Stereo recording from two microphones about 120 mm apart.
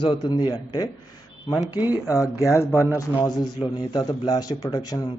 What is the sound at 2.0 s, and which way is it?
A man's voice, 25° left (ahead or behind).